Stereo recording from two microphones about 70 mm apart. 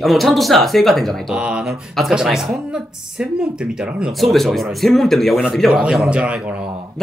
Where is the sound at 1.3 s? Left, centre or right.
Centre.